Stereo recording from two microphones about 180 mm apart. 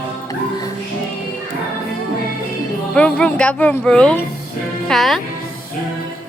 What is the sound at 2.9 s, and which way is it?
Speech, 5° left (ahead or behind).